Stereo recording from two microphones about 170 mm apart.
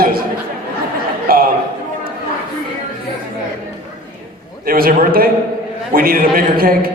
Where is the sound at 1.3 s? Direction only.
60° right (ahead or behind).